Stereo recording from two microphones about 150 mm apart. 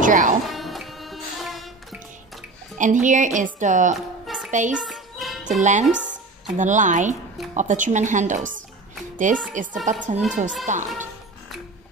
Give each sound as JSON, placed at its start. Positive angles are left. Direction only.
{"t": 0.0, "sound": "speech", "side_deg": -60}
{"t": 0.5, "sound": "music", "side_deg": 0}
{"t": 2.8, "sound": "a woman's voice", "side_deg": -60}
{"t": 3.9, "sound": "music", "side_deg": 0}
{"t": 4.5, "sound": "a child's voice", "side_deg": -55}
{"t": 4.7, "sound": "music", "side_deg": 0}
{"t": 5.5, "sound": "speech", "side_deg": -55}
{"t": 5.9, "sound": "a sound", "side_deg": -5}
{"t": 6.6, "sound": "a woman's voice", "side_deg": -55}